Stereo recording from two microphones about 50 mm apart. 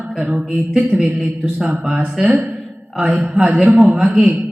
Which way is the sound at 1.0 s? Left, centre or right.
Centre.